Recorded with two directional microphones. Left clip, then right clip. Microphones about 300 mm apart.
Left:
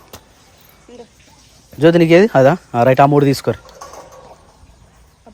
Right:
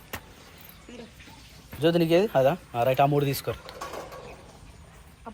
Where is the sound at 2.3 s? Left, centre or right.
Left.